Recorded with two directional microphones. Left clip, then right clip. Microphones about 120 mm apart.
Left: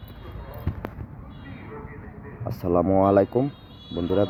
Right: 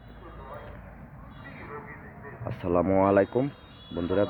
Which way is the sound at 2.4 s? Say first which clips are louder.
Left 3 dB; 30° left (ahead or behind).